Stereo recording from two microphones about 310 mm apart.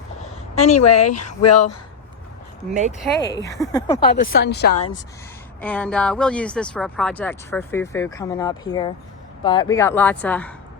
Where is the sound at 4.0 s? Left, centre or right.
Left.